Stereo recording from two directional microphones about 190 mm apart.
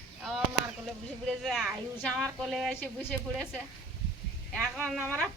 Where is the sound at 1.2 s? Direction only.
Centre (ahead or behind).